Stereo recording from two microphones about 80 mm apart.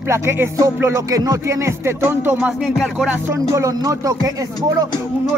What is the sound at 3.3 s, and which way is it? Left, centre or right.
Speech, right.